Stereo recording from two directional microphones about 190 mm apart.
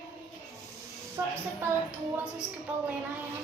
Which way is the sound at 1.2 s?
15° right (ahead or behind).